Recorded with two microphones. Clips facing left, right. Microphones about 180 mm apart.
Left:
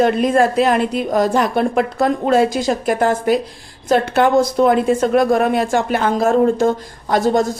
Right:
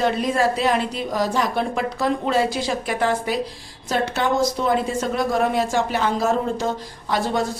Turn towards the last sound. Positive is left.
turn(degrees=45)  # may be behind; listen again after turning